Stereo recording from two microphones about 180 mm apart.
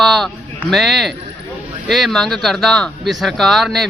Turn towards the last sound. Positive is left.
turn(degrees=0)  # may be behind; listen again after turning